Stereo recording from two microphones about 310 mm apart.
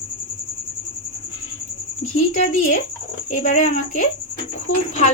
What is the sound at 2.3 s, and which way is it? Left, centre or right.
A woman's voice, left.